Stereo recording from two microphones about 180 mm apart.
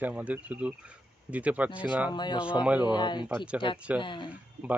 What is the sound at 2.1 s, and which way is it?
Speech, 25° left (ahead or behind).